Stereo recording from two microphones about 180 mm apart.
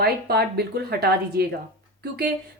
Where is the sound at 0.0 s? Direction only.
60° right (ahead or behind).